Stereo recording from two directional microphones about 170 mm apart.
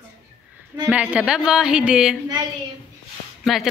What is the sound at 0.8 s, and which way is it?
A woman's voice, 10° right (ahead or behind).